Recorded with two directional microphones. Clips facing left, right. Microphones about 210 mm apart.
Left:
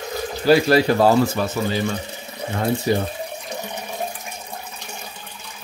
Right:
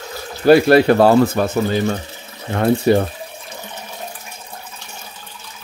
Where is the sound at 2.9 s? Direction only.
65° right (ahead or behind).